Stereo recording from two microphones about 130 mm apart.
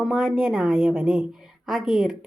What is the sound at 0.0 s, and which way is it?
A woman's voice, 5° right (ahead or behind).